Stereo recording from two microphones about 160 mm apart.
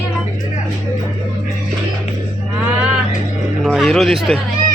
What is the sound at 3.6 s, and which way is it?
Speech, centre (ahead or behind).